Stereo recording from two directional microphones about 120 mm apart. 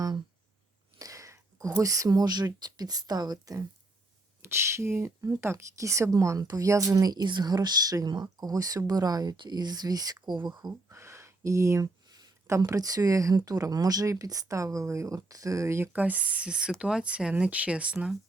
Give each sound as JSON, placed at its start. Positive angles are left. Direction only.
{"t": 0.9, "sound": "speech", "side_deg": -30}
{"t": 10.8, "sound": "a sound", "side_deg": -25}
{"t": 12.5, "sound": "speech", "side_deg": -25}